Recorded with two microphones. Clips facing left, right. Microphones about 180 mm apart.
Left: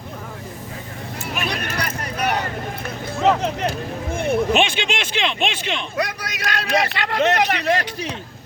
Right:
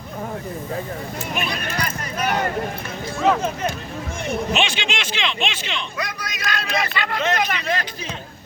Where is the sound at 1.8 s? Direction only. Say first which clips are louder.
Even; 65° left (ahead or behind).